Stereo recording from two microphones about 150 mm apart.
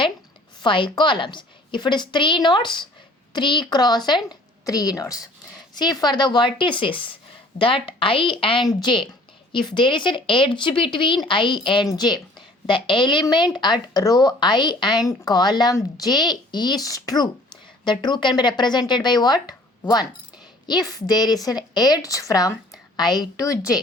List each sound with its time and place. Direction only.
0.6 s a woman's voice: 35° left (ahead or behind)
20.7 s speech: 25° left (ahead or behind)